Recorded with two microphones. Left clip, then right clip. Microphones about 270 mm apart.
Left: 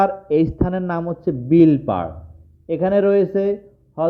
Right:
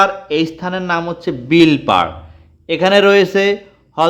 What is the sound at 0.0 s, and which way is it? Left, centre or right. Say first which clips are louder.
A man's voice: right 3 dB; centre.